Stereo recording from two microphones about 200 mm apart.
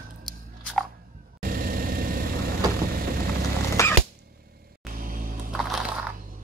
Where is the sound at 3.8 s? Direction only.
15° left (ahead or behind).